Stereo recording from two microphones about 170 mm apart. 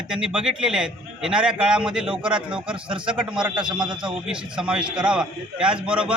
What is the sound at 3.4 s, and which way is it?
Speech, 5° right (ahead or behind).